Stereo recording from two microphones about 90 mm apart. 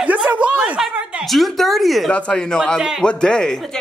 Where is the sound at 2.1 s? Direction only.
10° left (ahead or behind).